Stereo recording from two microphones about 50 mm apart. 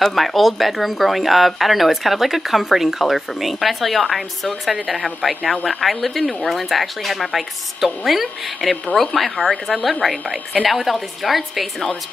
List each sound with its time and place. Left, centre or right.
0.0 s a woman's voice: centre
10.2 s a woman's voice: centre
10.7 s speech: centre